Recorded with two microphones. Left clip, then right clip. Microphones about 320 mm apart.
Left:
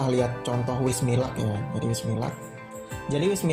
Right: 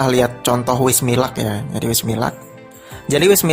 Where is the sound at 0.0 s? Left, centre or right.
Right.